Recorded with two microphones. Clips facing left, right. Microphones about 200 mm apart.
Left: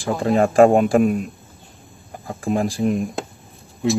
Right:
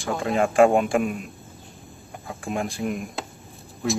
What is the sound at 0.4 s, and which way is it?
Speech, 35° left (ahead or behind).